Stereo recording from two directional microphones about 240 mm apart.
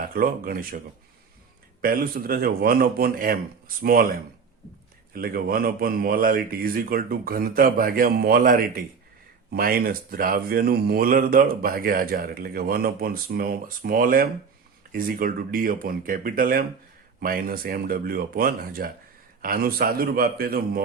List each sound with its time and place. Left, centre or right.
0.0 s speech: right
1.8 s speech: right